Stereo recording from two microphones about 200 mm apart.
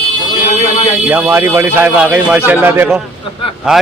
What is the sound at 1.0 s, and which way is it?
A man's voice, 10° right (ahead or behind).